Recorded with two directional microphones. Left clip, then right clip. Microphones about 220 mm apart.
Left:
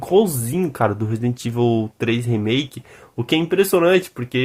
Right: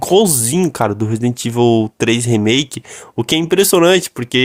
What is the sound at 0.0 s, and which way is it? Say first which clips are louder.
Speech: right 5 dB; 40° right (ahead or behind).